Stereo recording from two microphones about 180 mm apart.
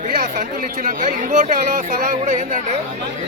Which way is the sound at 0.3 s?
45° right (ahead or behind).